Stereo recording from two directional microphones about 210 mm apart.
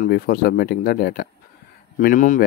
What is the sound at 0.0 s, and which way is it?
Speech, 45° left (ahead or behind).